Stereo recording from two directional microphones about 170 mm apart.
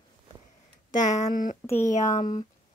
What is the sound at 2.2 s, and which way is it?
Speech, 25° left (ahead or behind).